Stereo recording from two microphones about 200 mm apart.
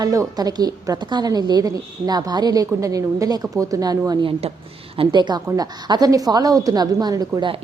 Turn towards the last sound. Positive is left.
turn(degrees=-20)  # may be behind; listen again after turning